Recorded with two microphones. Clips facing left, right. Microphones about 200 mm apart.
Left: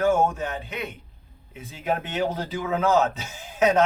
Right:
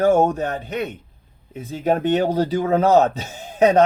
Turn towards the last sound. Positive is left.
turn(degrees=-40)  # may be behind; listen again after turning